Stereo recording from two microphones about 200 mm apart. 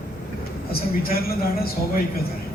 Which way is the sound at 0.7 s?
50° left (ahead or behind).